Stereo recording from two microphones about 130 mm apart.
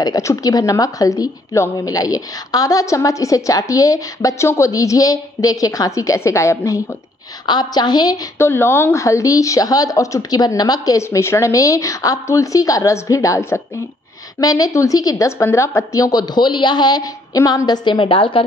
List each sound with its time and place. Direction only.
0.0 s a woman's voice: 25° left (ahead or behind)
7.4 s a woman's voice: 35° left (ahead or behind)
8.4 s a woman's voice: 20° left (ahead or behind); by 18.4 s 45° left (ahead or behind)